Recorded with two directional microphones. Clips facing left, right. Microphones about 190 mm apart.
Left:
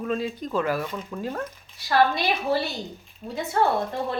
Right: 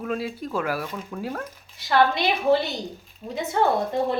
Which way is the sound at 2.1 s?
20° right (ahead or behind).